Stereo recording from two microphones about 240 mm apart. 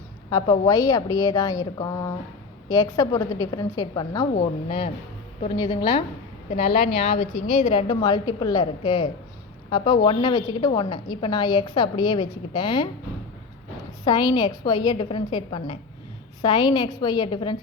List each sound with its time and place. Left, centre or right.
0.3 s a woman's voice: centre
14.0 s a woman's voice: centre